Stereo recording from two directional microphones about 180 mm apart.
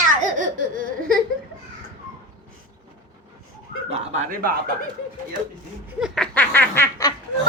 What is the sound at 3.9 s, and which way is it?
Speech, 35° right (ahead or behind).